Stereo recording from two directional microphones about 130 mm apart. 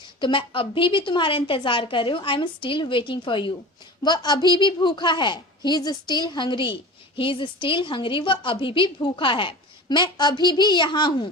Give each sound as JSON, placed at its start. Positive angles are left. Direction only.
{"t": 0.2, "sound": "a woman's voice", "side_deg": 40}